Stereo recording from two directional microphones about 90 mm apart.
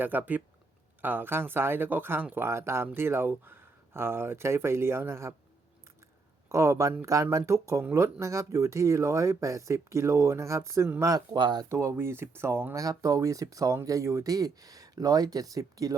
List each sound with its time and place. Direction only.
0.0 s speech: 20° right (ahead or behind)
6.5 s speech: 30° right (ahead or behind)
11.3 s speech: 55° right (ahead or behind)
11.7 s speech: 35° right (ahead or behind)
12.8 s speech: 40° right (ahead or behind)